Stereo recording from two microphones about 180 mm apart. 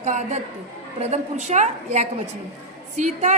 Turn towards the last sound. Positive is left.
turn(degrees=-45)  # may be behind; listen again after turning